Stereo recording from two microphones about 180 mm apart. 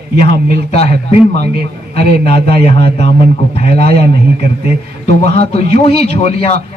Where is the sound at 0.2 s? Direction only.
35° left (ahead or behind).